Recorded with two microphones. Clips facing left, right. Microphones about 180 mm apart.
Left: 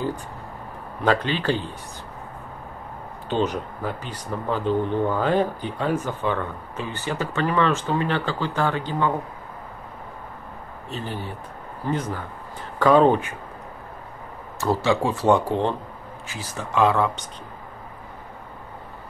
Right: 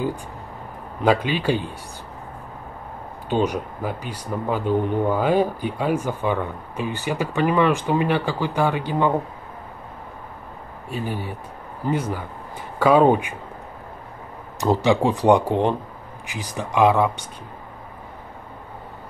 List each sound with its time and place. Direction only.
1.0 s speech: 10° right (ahead or behind)
3.3 s speech: 10° right (ahead or behind)
10.9 s speech: 10° right (ahead or behind)
14.6 s speech: 15° right (ahead or behind)